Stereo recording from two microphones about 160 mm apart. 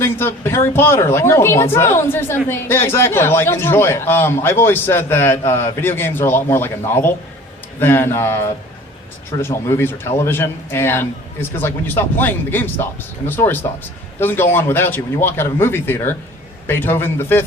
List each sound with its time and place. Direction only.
0.0 s speech: 15° left (ahead or behind)